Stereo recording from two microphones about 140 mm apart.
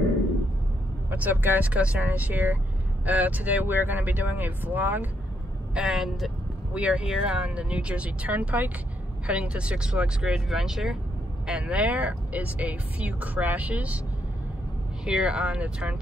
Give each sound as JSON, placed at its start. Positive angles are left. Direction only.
{"t": 1.1, "sound": "speech", "side_deg": -15}
{"t": 15.0, "sound": "speech", "side_deg": -5}